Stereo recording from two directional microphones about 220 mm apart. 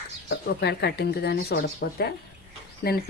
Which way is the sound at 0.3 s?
50° left (ahead or behind).